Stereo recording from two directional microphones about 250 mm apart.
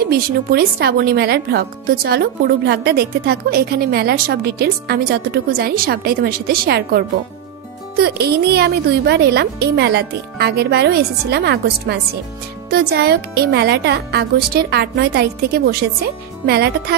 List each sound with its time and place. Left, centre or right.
0.0 s speech: right